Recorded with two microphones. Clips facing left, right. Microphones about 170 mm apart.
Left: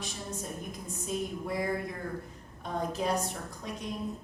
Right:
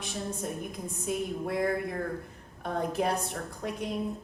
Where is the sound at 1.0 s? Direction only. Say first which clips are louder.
Right 2 dB; 60° right (ahead or behind).